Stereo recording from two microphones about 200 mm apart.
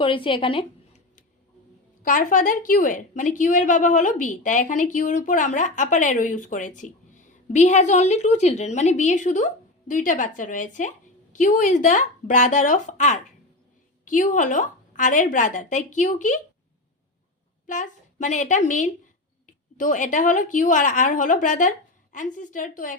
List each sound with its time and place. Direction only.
0.0 s a woman's voice: 25° left (ahead or behind)
2.0 s a woman's voice: 40° left (ahead or behind)
17.7 s a woman's voice: 40° left (ahead or behind)